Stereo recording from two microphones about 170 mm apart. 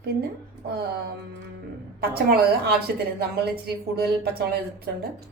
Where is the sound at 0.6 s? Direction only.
70° right (ahead or behind).